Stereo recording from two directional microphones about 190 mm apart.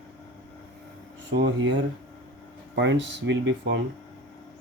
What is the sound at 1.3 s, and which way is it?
Speech, 65° right (ahead or behind).